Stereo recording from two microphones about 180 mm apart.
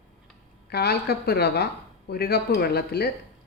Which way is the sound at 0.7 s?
65° left (ahead or behind).